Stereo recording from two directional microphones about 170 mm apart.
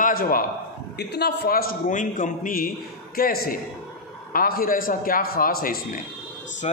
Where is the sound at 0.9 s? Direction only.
75° left (ahead or behind); by 6.0 s 60° left (ahead or behind).